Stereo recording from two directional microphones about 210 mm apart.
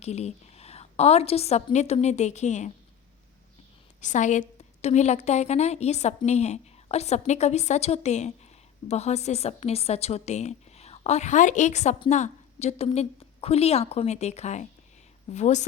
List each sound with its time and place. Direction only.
0.0 s a woman's voice: 30° left (ahead or behind)
4.0 s a woman's voice: 35° left (ahead or behind)